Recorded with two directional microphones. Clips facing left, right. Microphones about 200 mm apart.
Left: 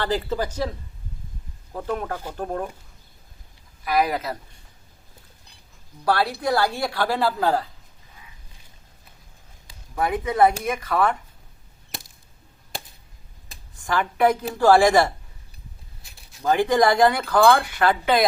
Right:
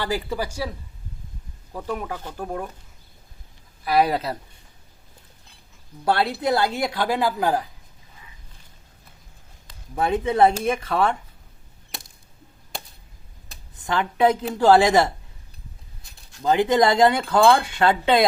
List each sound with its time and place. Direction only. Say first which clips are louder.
0.0 s speech: left 2 dB; 10° right (ahead or behind)
1.9 s speech: left 2 dB; 10° right (ahead or behind)
3.8 s speech: right 2 dB; 30° right (ahead or behind)
6.1 s speech: right 1 dB; 25° right (ahead or behind)
9.9 s speech: right 2 dB; 25° right (ahead or behind)
13.7 s speech: even; 20° right (ahead or behind)
16.4 s speech: right 1 dB; 20° right (ahead or behind)